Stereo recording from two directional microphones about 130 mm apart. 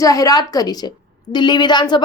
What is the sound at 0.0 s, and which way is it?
A woman's voice, 25° left (ahead or behind).